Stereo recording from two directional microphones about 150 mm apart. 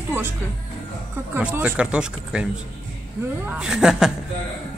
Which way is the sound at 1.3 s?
10° right (ahead or behind).